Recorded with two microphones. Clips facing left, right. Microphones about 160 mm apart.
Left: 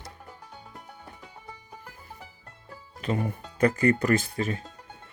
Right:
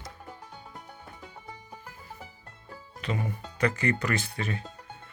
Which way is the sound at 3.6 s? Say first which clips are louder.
Left 5 dB; 45° left (ahead or behind).